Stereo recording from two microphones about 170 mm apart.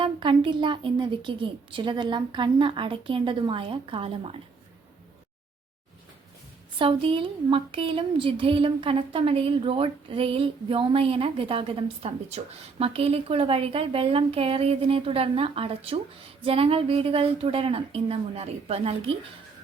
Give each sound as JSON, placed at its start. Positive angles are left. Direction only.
{"t": 0.0, "sound": "a woman's voice", "side_deg": -30}
{"t": 6.7, "sound": "speech", "side_deg": -30}